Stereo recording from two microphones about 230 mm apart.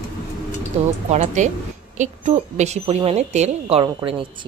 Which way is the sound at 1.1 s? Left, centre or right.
Right.